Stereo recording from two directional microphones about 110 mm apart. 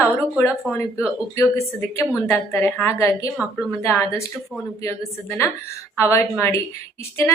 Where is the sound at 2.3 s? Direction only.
20° left (ahead or behind).